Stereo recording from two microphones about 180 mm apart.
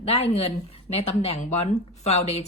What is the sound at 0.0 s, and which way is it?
A woman's voice, 35° left (ahead or behind).